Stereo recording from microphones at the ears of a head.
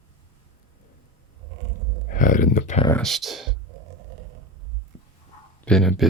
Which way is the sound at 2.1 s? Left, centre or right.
Left.